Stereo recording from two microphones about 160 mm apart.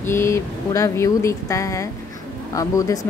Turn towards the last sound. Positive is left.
turn(degrees=20)  # may be behind; listen again after turning